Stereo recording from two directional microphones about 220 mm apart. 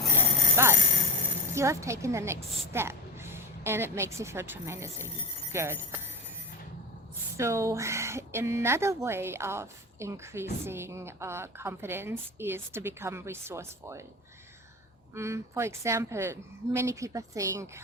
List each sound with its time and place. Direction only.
0.1 s bicycle bell: 10° right (ahead or behind)
1.5 s speech: 15° right (ahead or behind)
7.3 s speech: 15° right (ahead or behind)
15.1 s speech: 10° right (ahead or behind)